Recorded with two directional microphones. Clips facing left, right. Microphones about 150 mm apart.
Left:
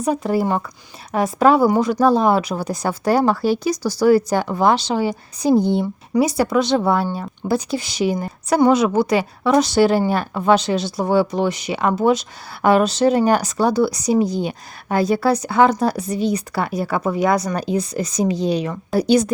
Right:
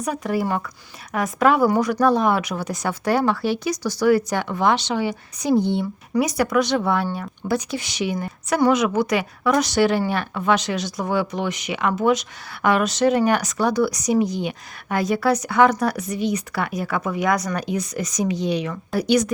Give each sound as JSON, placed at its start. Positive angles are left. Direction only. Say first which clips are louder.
{"t": 0.0, "sound": "speech", "louder": "left 4 dB", "side_deg": 30}